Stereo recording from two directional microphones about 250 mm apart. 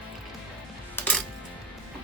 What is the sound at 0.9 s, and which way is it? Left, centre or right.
Coin, centre.